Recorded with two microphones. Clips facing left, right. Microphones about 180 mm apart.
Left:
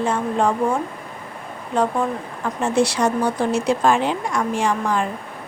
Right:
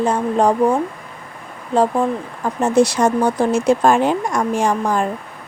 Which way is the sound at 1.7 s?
30° right (ahead or behind).